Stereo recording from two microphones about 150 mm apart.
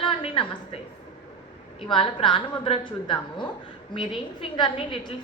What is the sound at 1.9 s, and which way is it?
A woman's voice, 35° left (ahead or behind).